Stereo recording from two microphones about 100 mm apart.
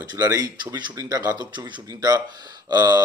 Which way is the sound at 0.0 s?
35° right (ahead or behind).